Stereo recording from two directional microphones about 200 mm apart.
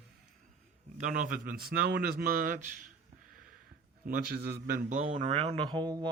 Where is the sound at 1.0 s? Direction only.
40° right (ahead or behind).